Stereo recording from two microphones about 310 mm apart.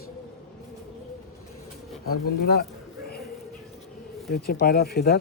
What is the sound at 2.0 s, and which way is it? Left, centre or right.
Speech, left.